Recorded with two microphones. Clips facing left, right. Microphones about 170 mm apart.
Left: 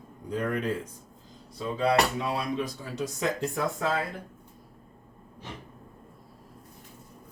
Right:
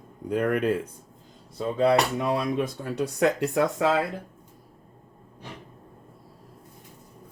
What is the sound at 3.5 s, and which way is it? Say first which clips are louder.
Speech: right 6 dB; 75° right (ahead or behind).